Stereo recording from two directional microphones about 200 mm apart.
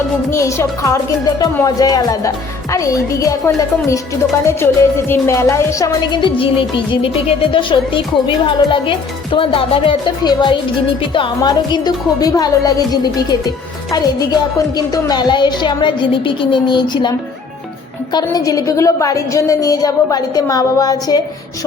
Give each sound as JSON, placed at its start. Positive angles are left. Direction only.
{"t": 0.3, "sound": "speech", "side_deg": 15}
{"t": 4.4, "sound": "music", "side_deg": 10}
{"t": 14.8, "sound": "music", "side_deg": 20}
{"t": 18.1, "sound": "speech", "side_deg": 20}